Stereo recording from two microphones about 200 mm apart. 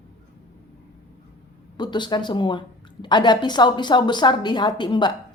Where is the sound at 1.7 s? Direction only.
20° left (ahead or behind).